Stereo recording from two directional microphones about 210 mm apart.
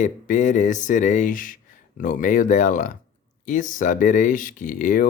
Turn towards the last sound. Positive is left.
turn(degrees=35)  # may be behind; listen again after turning